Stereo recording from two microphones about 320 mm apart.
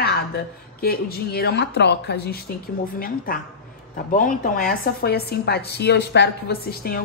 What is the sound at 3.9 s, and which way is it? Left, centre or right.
A woman's voice, left.